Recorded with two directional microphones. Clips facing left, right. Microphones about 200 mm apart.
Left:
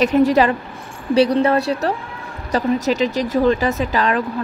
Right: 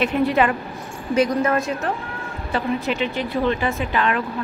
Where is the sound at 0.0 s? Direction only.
40° left (ahead or behind).